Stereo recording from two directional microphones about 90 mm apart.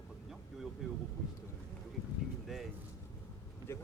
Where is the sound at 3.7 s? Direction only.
30° left (ahead or behind).